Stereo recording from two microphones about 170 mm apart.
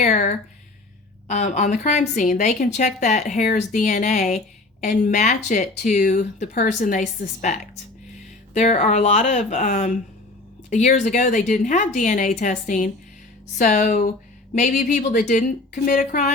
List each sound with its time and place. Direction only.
0.0 s a woman's voice: 50° left (ahead or behind)